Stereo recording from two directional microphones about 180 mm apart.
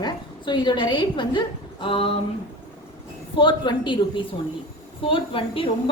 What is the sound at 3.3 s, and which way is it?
Speech, 25° left (ahead or behind).